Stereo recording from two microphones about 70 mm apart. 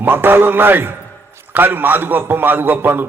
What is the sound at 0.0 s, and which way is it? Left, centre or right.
A man's voice, right.